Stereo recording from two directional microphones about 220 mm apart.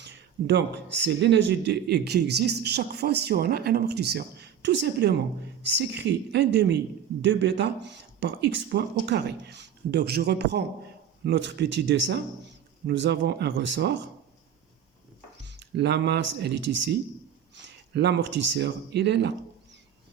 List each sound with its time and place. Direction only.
0.0 s speech: 50° right (ahead or behind)
15.4 s speech: 50° right (ahead or behind)